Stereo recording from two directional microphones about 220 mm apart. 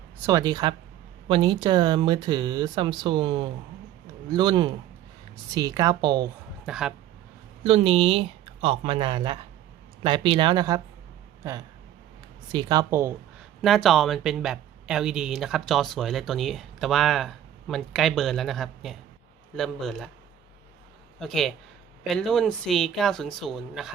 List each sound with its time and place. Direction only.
0.3 s speech: 15° right (ahead or behind)
6.7 s speech: centre (ahead or behind)
7.6 s speech: 25° right (ahead or behind)
12.5 s speech: 20° right (ahead or behind)
13.6 s speech: centre (ahead or behind)
21.2 s speech: centre (ahead or behind)